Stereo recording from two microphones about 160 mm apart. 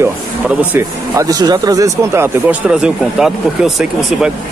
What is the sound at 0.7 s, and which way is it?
Speech, 20° right (ahead or behind).